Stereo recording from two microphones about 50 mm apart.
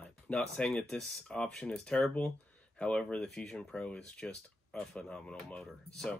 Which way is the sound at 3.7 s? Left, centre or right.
Left.